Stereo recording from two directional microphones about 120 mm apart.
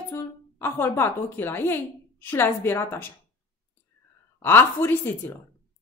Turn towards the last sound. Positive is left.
turn(degrees=20)  # may be behind; listen again after turning